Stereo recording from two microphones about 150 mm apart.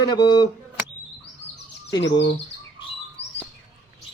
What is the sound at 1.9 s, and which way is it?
Speech, 25° left (ahead or behind).